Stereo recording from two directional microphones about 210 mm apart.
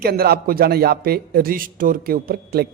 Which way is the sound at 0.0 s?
45° right (ahead or behind).